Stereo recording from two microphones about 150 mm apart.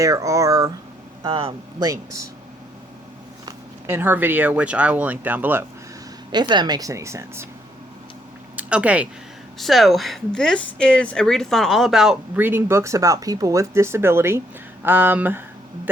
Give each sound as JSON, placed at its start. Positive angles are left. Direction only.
{"t": 0.0, "sound": "speech", "side_deg": -20}
{"t": 1.2, "sound": "speech", "side_deg": -35}
{"t": 1.8, "sound": "speech", "side_deg": -20}
{"t": 3.8, "sound": "speech", "side_deg": -15}
{"t": 6.3, "sound": "speech", "side_deg": -30}
{"t": 8.5, "sound": "speech", "side_deg": -10}
{"t": 12.4, "sound": "speech", "side_deg": -15}